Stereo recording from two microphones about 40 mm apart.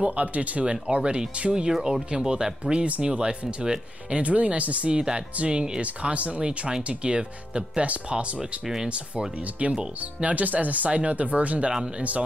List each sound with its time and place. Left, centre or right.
0.0 s speech: right
1.7 s speech: centre
4.1 s speech: right
4.9 s speech: right
8.4 s speech: centre
8.8 s speech: right
10.9 s speech: right